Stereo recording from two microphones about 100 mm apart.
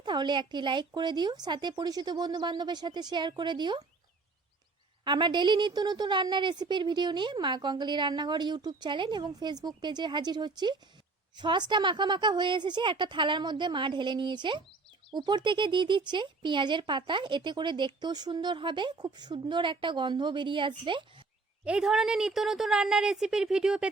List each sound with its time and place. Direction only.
0.0 s speech: 50° right (ahead or behind)
5.0 s speech: 50° right (ahead or behind)
21.6 s a woman's voice: 10° right (ahead or behind)